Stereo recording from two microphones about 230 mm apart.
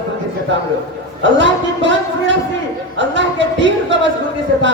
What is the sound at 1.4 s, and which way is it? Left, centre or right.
Speech, right.